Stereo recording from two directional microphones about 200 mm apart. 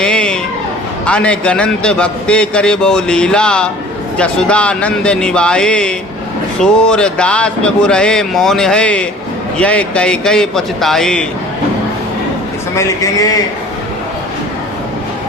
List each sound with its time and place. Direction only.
0.0 s a sound: 5° left (ahead or behind)
1.0 s a man's voice: 5° left (ahead or behind)
12.7 s a man's voice: 15° left (ahead or behind)